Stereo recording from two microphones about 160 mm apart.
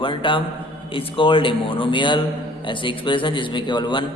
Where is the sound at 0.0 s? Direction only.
30° left (ahead or behind).